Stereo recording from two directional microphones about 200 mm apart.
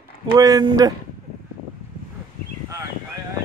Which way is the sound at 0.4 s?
15° right (ahead or behind).